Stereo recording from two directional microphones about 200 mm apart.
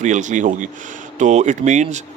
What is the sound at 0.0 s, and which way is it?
Speech, 40° right (ahead or behind).